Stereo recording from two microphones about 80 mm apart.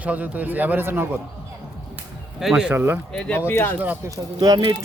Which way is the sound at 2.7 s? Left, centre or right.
Right.